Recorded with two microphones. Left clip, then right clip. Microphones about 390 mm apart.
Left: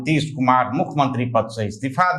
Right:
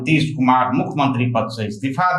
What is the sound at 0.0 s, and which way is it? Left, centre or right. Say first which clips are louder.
Speech: right 2 dB; left.